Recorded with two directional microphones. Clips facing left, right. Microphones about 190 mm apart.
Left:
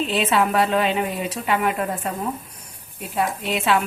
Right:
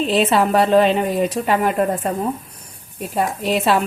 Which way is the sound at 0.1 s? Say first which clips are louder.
Right 6 dB; 35° right (ahead or behind).